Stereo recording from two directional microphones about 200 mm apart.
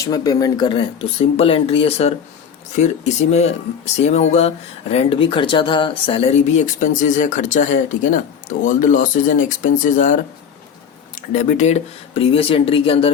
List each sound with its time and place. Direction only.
0.0 s speech: 20° left (ahead or behind)